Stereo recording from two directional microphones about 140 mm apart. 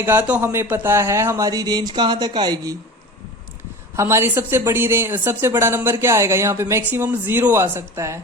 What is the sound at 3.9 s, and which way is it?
Speech, 20° right (ahead or behind).